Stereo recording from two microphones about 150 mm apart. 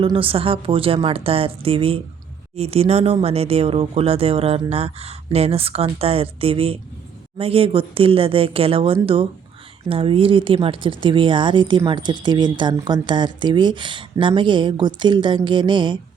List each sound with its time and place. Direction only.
0.0 s speech: 35° right (ahead or behind)